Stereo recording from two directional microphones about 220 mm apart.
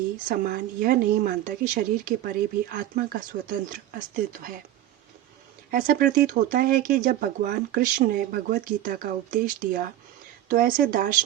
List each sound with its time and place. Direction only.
0.3 s speech: 40° right (ahead or behind)
5.7 s speech: 40° right (ahead or behind)